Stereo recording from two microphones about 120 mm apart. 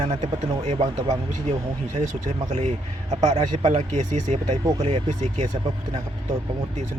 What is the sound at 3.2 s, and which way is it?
Speech, 65° right (ahead or behind).